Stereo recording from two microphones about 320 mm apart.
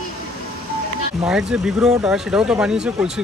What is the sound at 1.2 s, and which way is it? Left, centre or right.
Speech, centre.